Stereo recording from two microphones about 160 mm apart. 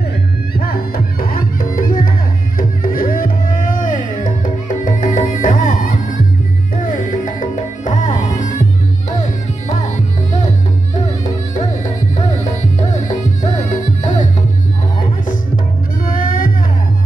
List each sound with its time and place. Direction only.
0.6 s music: 65° left (ahead or behind); by 8.5 s 50° left (ahead or behind)
12.9 s music: 50° left (ahead or behind)
16.1 s music: 60° left (ahead or behind)